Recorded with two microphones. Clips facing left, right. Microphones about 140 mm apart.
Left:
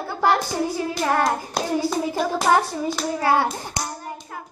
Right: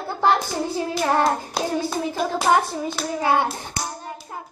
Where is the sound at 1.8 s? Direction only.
Centre (ahead or behind).